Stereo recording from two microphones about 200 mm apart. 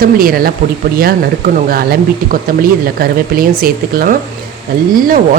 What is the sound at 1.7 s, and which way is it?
Speech, 50° right (ahead or behind).